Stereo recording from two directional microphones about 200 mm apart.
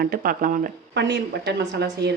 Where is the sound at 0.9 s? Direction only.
60° right (ahead or behind).